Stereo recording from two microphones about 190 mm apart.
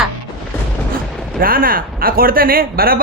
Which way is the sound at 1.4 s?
50° right (ahead or behind).